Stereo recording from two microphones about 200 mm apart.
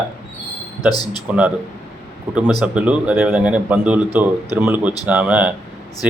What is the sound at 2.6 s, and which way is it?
A man's voice, 5° right (ahead or behind).